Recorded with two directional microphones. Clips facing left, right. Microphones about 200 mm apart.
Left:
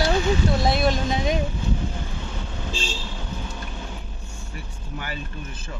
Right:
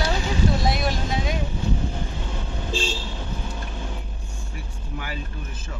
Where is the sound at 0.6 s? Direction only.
25° left (ahead or behind).